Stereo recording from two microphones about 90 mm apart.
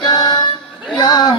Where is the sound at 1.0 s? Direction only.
50° left (ahead or behind).